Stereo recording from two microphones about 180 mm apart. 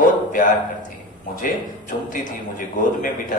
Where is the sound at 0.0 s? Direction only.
45° left (ahead or behind).